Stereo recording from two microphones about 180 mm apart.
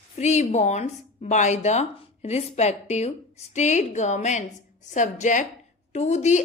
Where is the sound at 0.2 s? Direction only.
40° left (ahead or behind).